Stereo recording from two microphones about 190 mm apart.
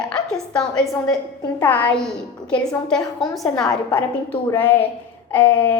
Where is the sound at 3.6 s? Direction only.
20° left (ahead or behind).